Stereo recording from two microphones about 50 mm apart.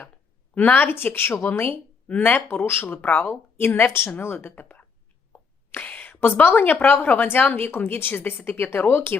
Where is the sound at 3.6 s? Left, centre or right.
Left.